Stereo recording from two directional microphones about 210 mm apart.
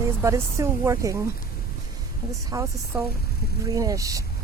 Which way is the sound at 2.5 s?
15° right (ahead or behind).